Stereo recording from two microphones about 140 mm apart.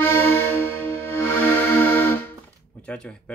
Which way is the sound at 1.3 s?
10° left (ahead or behind).